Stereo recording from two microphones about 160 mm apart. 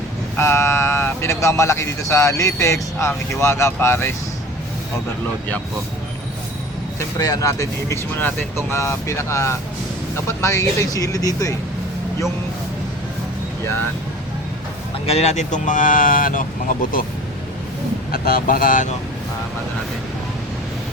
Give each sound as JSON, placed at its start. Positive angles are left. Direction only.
{"t": 0.3, "sound": "speech", "side_deg": 15}
{"t": 7.2, "sound": "speech", "side_deg": 20}
{"t": 15.0, "sound": "speech", "side_deg": 40}
{"t": 18.1, "sound": "speech", "side_deg": 65}